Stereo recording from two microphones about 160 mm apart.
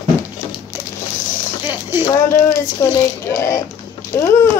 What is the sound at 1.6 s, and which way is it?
Speech, 15° right (ahead or behind).